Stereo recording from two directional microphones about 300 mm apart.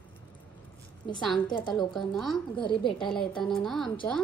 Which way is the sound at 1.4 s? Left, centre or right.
Centre.